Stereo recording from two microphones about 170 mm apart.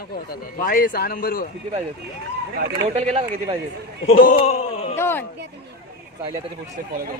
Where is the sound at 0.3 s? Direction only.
55° left (ahead or behind).